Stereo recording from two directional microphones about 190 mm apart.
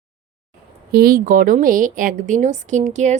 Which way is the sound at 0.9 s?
50° right (ahead or behind).